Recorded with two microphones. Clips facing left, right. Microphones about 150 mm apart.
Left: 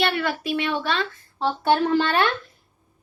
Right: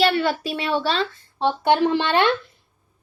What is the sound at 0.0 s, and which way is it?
A woman's voice, 30° right (ahead or behind).